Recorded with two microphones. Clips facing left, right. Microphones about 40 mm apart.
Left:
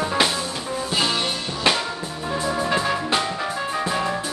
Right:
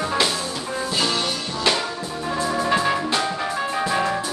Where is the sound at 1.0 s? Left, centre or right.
Left.